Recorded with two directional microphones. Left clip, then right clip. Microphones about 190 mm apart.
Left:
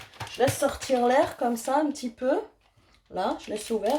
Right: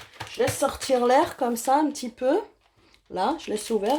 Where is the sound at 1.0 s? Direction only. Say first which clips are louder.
Right 1 dB; 45° right (ahead or behind).